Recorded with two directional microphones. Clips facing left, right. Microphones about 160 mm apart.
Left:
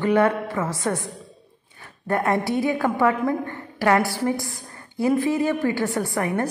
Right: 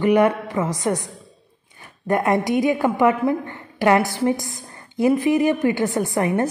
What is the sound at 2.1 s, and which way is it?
A woman's voice, 15° right (ahead or behind).